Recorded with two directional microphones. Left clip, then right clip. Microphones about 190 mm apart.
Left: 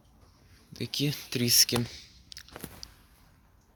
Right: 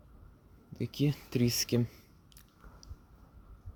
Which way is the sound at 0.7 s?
20° right (ahead or behind).